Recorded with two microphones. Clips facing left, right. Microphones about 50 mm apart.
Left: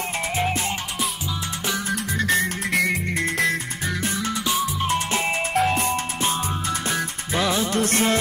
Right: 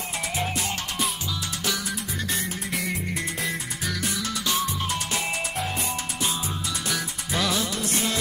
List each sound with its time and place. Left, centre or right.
1.9 s music: left
2.7 s music: left
3.8 s music: left
5.5 s music: left
7.3 s music: left
7.7 s music: left